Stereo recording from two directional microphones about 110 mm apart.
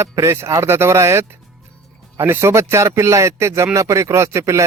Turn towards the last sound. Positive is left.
turn(degrees=-25)  # may be behind; listen again after turning